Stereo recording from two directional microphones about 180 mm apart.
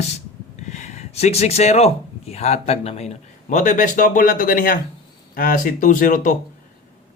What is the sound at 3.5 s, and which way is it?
Speech, 45° left (ahead or behind).